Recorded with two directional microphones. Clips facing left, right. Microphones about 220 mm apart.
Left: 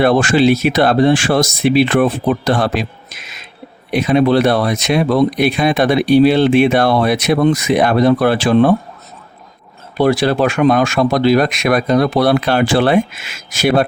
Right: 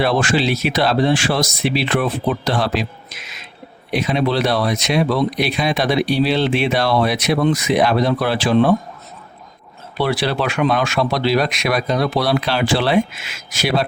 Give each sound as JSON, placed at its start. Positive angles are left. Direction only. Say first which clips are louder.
{"t": 0.0, "sound": "speech", "louder": "left 6 dB", "side_deg": 50}
{"t": 3.2, "sound": "a sound", "louder": "left 1 dB", "side_deg": 50}
{"t": 3.9, "sound": "speech", "louder": "left 6 dB", "side_deg": 50}
{"t": 10.0, "sound": "speech", "louder": "left 6 dB", "side_deg": 45}